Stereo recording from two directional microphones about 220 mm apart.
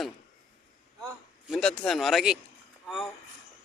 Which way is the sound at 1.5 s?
Centre (ahead or behind).